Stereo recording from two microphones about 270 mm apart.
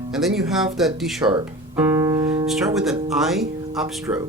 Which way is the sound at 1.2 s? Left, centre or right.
Centre.